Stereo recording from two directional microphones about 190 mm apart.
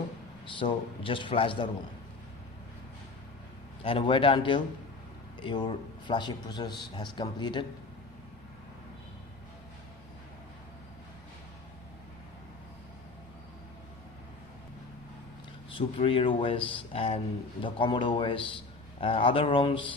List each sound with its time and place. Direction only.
0.4 s a man's voice: 25° left (ahead or behind)
3.8 s a man's voice: 25° left (ahead or behind)
16.0 s a man's voice: 30° left (ahead or behind)